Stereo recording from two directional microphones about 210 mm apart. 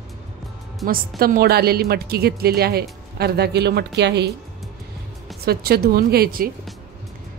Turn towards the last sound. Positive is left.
turn(degrees=-45)  # may be behind; listen again after turning